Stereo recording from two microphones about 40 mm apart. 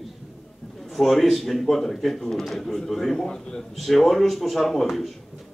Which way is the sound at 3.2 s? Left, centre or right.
Centre.